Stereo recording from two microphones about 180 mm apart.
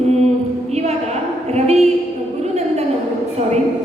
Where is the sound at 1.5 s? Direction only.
35° right (ahead or behind).